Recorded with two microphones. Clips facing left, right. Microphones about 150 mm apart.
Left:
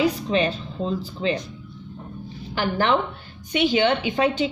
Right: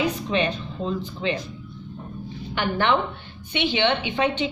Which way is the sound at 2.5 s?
35° left (ahead or behind).